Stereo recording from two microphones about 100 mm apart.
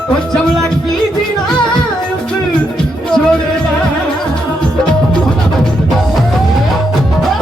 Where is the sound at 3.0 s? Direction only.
10° left (ahead or behind).